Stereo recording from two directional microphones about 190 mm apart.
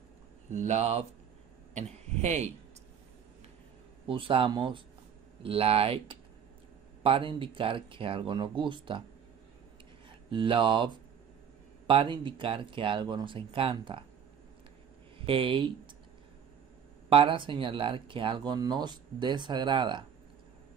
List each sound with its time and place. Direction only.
0.5 s speech: 40° right (ahead or behind)
4.1 s speech: 25° right (ahead or behind)
7.0 s speech: 30° right (ahead or behind)
10.0 s speech: 25° right (ahead or behind)
11.9 s speech: 25° right (ahead or behind)
15.1 s speech: 30° right (ahead or behind)
17.1 s speech: 25° right (ahead or behind)